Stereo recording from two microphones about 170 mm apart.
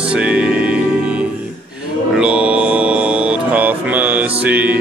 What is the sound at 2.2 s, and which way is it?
Music, 5° right (ahead or behind).